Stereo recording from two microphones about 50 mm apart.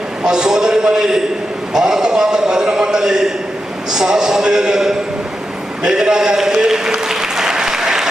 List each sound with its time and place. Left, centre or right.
0.2 s a man's voice: centre
5.8 s applause: centre